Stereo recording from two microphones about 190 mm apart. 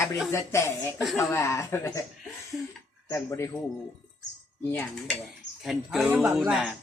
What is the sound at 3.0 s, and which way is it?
Speech, 15° left (ahead or behind).